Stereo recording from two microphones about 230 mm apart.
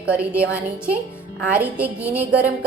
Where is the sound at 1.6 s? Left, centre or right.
Centre.